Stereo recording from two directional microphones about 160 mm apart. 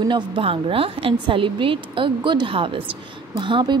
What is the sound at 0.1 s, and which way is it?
A woman's voice, 35° right (ahead or behind).